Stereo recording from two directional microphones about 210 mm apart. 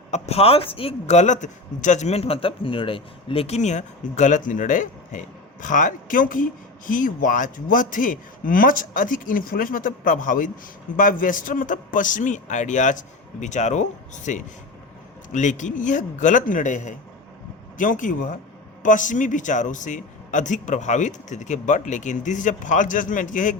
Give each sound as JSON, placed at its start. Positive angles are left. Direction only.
{"t": 0.1, "sound": "a man's voice", "side_deg": 30}